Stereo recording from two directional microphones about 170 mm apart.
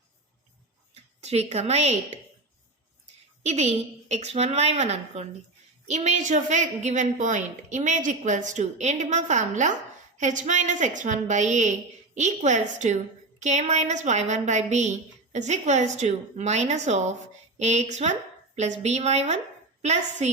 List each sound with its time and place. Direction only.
1.2 s a woman's voice: 40° right (ahead or behind)
3.4 s a woman's voice: 40° right (ahead or behind)